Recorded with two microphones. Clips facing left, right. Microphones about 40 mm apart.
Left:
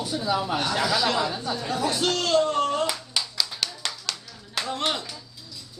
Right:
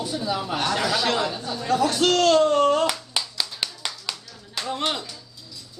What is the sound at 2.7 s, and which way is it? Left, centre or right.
Clapping, right.